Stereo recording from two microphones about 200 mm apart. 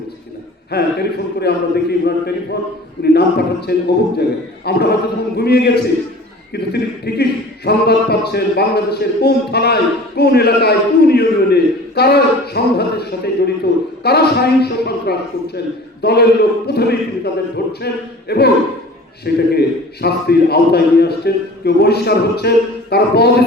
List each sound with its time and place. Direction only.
0.7 s speech: 55° left (ahead or behind)